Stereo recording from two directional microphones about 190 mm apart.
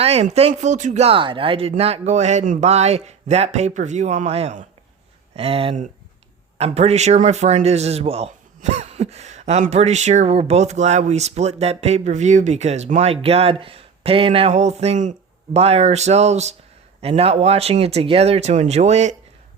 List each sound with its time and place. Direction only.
0.0 s speech: 35° right (ahead or behind)